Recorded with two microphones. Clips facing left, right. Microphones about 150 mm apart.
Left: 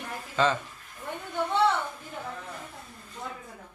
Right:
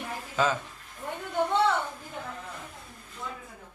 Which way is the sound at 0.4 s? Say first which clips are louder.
Left 1 dB; 10° right (ahead or behind).